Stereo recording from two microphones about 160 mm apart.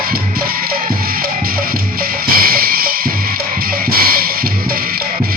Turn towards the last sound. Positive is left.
turn(degrees=-65)  # may be behind; listen again after turning